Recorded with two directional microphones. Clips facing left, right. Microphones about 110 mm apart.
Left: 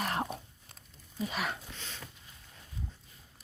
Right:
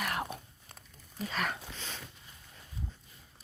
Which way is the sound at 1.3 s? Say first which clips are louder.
Right 2 dB; 5° left (ahead or behind).